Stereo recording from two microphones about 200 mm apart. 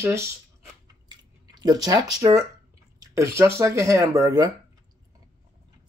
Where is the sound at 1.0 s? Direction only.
20° right (ahead or behind).